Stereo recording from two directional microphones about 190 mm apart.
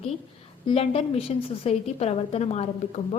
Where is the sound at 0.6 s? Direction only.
30° left (ahead or behind).